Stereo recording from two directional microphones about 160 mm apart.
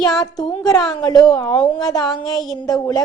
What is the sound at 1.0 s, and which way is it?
A woman's voice, 25° left (ahead or behind).